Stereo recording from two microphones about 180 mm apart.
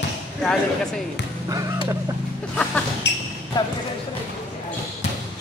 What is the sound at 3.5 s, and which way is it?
Speech, 25° left (ahead or behind).